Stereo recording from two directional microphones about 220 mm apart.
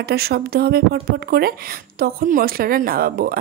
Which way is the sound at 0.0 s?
45° right (ahead or behind).